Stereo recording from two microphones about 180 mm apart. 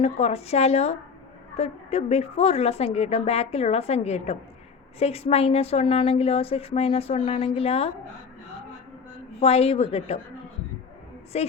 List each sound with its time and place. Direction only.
0.0 s a woman's voice: 35° left (ahead or behind)
9.4 s a woman's voice: 35° left (ahead or behind)
11.3 s a woman's voice: 35° left (ahead or behind)